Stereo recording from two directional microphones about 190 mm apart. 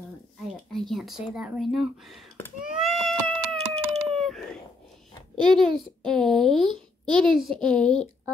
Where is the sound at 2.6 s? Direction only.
Centre (ahead or behind).